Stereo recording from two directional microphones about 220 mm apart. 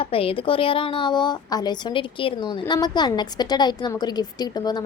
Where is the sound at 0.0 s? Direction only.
25° left (ahead or behind).